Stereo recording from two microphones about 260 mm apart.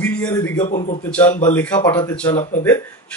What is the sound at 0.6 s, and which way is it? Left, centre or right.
Speech, left.